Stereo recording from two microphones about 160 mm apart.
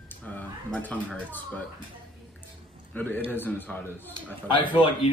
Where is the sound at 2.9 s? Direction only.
10° left (ahead or behind).